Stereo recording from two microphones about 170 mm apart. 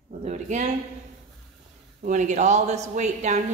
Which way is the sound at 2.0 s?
45° right (ahead or behind).